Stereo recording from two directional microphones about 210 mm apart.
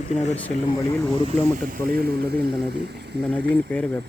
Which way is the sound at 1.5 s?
45° right (ahead or behind).